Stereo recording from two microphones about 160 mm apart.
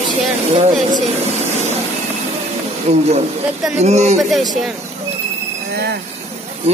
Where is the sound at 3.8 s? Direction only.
45° right (ahead or behind).